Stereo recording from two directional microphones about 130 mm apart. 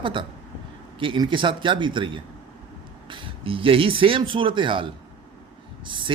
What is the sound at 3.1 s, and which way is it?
A man's voice, 40° right (ahead or behind).